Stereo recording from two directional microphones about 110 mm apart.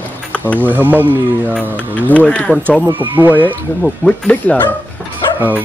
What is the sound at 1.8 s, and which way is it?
Speech, 15° left (ahead or behind).